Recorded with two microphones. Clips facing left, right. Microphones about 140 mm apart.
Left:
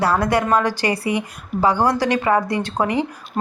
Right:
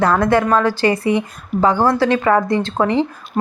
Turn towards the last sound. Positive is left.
turn(degrees=15)  # may be behind; listen again after turning